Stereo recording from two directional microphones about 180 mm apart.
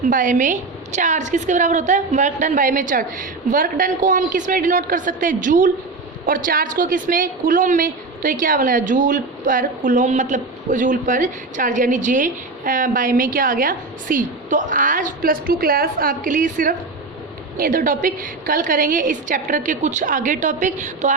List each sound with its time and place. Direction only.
0.0 s a woman's voice: 45° right (ahead or behind)